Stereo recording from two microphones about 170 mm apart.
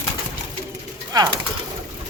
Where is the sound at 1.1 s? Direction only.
20° right (ahead or behind).